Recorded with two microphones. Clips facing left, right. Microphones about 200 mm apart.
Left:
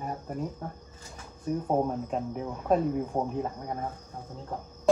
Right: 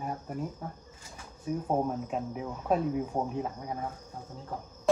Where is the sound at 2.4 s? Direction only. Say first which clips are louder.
Left 3 dB; 5° left (ahead or behind).